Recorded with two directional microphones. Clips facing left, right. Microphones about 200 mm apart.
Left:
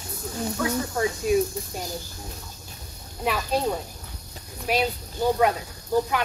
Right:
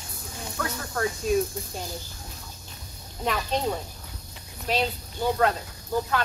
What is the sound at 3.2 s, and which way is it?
Speech, 5° left (ahead or behind).